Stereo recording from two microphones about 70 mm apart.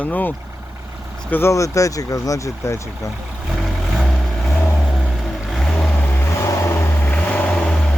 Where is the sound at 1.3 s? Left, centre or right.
Left.